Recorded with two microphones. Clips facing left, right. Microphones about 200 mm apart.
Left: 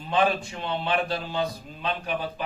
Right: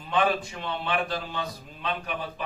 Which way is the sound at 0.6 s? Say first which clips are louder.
Left 6 dB; 30° left (ahead or behind).